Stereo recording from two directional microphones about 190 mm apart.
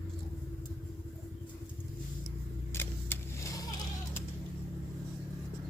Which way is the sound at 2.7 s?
15° left (ahead or behind).